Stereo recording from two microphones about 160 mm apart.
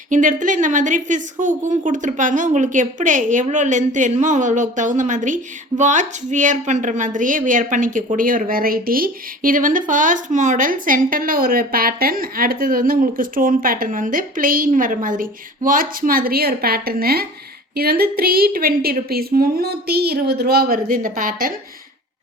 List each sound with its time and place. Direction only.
0.1 s a woman's voice: 55° right (ahead or behind)